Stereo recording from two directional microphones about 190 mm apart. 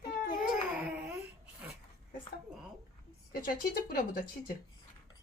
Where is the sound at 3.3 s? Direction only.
50° left (ahead or behind).